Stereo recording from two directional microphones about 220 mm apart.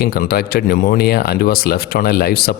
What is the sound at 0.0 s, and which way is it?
Speech, 45° left (ahead or behind).